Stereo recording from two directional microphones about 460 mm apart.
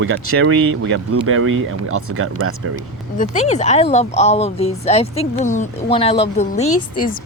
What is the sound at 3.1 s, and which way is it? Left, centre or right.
Speech, centre.